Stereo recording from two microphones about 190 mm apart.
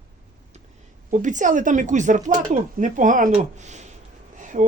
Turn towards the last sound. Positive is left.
turn(degrees=-40)  # may be behind; listen again after turning